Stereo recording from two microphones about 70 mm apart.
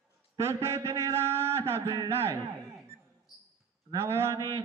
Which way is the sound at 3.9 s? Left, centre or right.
Right.